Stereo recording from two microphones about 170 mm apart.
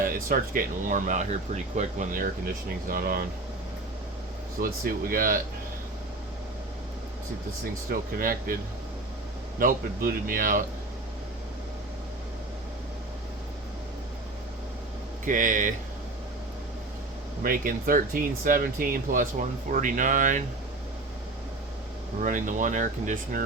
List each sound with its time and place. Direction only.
0.0 s speech: 55° right (ahead or behind)
4.6 s speech: 60° right (ahead or behind)
7.6 s speech: 55° right (ahead or behind)
9.6 s speech: 55° right (ahead or behind)
15.2 s speech: 50° right (ahead or behind)
17.4 s speech: 55° right (ahead or behind)
22.2 s speech: 50° right (ahead or behind)